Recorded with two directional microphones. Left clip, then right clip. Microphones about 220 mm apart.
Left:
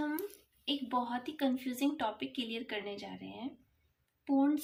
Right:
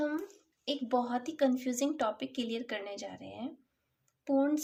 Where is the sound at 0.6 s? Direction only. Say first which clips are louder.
Right 3 dB; 55° right (ahead or behind).